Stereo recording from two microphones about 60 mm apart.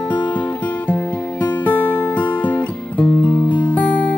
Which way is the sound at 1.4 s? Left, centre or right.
Left.